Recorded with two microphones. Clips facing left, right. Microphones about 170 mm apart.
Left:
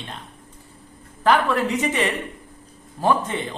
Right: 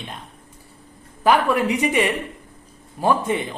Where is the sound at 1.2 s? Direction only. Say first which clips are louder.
Right 1 dB; 10° right (ahead or behind).